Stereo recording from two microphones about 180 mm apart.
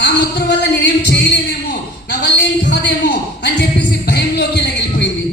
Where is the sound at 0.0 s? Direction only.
70° left (ahead or behind).